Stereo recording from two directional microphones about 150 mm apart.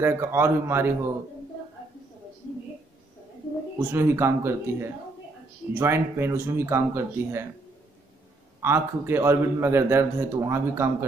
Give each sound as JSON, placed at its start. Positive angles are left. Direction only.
{"t": 0.0, "sound": "speech", "side_deg": -15}
{"t": 3.7, "sound": "speech", "side_deg": -15}
{"t": 8.6, "sound": "speech", "side_deg": -15}